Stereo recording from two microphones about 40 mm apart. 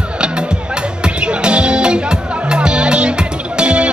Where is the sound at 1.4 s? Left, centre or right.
Right.